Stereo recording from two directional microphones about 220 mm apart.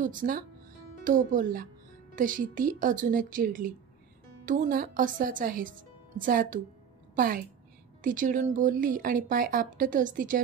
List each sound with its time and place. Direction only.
0.0 s speech: 35° right (ahead or behind)